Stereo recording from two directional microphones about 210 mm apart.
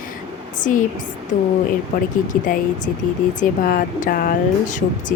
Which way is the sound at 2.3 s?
40° left (ahead or behind).